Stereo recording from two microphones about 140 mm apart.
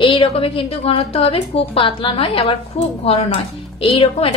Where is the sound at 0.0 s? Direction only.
40° left (ahead or behind).